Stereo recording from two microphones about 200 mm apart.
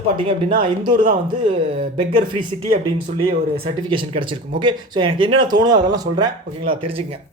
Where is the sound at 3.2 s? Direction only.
30° right (ahead or behind).